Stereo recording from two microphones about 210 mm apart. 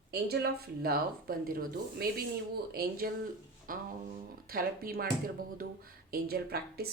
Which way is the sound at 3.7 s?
40° right (ahead or behind).